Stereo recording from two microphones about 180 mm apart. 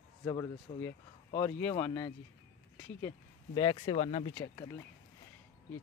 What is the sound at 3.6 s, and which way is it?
Speech, 30° left (ahead or behind).